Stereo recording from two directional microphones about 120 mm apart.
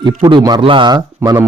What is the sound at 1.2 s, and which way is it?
Speech, 20° right (ahead or behind).